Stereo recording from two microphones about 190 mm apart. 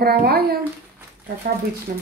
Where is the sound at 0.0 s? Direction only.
55° right (ahead or behind).